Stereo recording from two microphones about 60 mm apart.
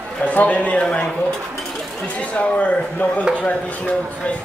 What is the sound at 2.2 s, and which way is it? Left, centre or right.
Speech, left.